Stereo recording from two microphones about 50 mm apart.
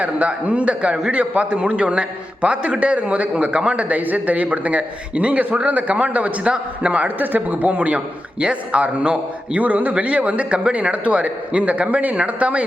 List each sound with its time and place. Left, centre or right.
0.0 s a man's voice: right